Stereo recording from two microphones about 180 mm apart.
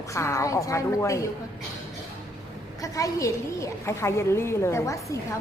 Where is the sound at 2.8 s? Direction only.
20° left (ahead or behind).